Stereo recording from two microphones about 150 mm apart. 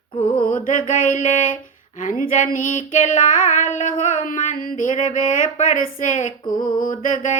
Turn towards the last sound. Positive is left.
turn(degrees=55)  # may be behind; listen again after turning